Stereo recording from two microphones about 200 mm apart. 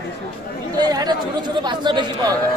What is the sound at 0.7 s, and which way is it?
Speech, 20° right (ahead or behind).